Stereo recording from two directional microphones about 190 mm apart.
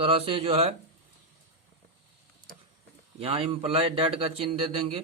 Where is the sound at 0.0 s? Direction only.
30° right (ahead or behind).